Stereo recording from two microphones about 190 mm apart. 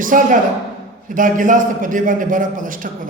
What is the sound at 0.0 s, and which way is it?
A man's voice, 45° right (ahead or behind).